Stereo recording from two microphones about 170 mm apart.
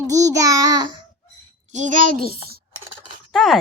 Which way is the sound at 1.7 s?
45° right (ahead or behind).